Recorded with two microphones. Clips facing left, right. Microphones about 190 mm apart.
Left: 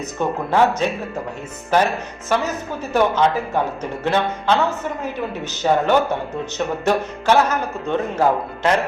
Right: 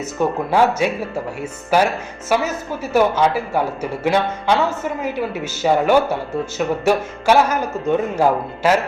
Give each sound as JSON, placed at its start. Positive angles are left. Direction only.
{"t": 0.2, "sound": "speech", "side_deg": -10}